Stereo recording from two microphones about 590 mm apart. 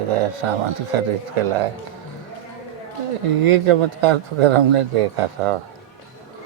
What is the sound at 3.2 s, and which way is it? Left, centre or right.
Speech, right.